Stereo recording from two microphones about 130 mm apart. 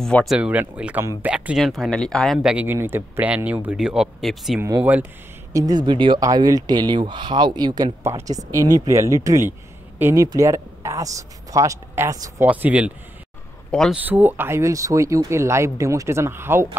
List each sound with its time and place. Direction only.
0.0 s speech: 5° left (ahead or behind)
0.4 s speech: 10° right (ahead or behind)
4.6 s speech: 25° right (ahead or behind)
12.4 s speech: 10° right (ahead or behind)
13.7 s speech: 5° left (ahead or behind)
13.9 s speech: 15° right (ahead or behind)